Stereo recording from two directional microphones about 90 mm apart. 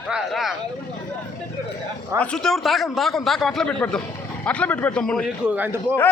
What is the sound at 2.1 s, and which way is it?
A man's voice, 10° left (ahead or behind).